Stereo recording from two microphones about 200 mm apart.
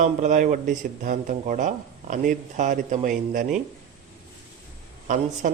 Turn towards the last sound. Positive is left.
turn(degrees=-40)  # may be behind; listen again after turning